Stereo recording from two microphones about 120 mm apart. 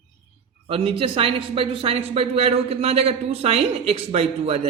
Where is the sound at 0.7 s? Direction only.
50° right (ahead or behind).